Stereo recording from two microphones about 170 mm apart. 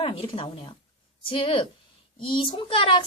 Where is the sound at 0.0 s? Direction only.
30° left (ahead or behind).